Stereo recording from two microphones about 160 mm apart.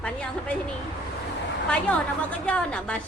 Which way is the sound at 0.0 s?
10° left (ahead or behind).